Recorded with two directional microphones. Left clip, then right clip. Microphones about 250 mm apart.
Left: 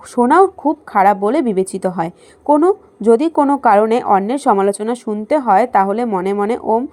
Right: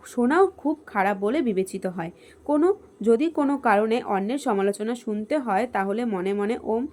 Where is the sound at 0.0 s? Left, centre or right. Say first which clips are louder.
Left 9 dB; centre.